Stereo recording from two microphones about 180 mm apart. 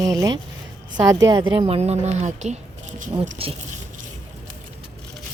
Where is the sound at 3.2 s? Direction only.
30° right (ahead or behind).